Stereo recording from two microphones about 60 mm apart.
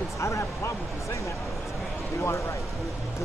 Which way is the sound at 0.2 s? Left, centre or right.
Left.